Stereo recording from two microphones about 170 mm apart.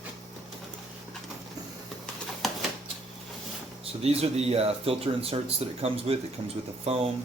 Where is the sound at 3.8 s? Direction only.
35° right (ahead or behind).